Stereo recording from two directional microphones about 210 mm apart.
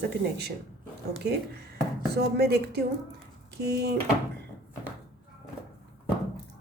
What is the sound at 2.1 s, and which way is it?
Speech, 50° right (ahead or behind).